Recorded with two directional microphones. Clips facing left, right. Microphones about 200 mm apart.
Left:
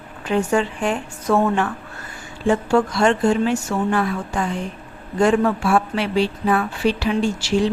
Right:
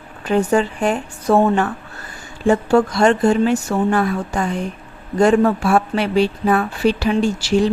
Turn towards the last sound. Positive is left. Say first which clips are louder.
# right 3 dB
turn(degrees=-40)  # may be behind; listen again after turning